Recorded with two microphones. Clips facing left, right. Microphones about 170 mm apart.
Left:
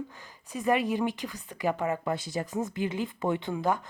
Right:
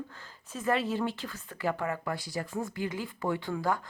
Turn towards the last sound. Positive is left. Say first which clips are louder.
# left 2 dB
turn(degrees=20)  # may be behind; listen again after turning